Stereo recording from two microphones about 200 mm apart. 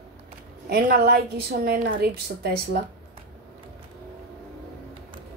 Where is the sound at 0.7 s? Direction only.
50° right (ahead or behind).